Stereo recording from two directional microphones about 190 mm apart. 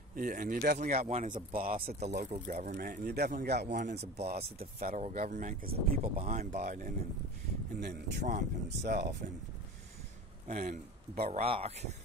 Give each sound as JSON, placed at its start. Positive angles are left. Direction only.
{"t": 0.1, "sound": "speech", "side_deg": -45}
{"t": 4.7, "sound": "speech", "side_deg": -50}
{"t": 7.8, "sound": "speech", "side_deg": -60}
{"t": 8.3, "sound": "speech", "side_deg": -40}
{"t": 10.4, "sound": "speech", "side_deg": -40}